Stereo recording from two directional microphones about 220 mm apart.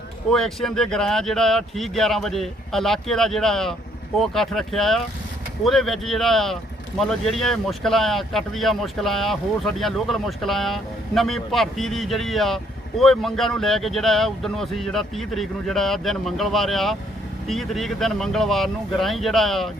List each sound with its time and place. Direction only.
0.3 s speech: centre (ahead or behind)